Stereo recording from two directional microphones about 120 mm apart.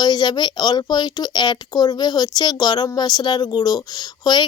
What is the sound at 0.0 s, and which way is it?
A woman's voice, 35° left (ahead or behind).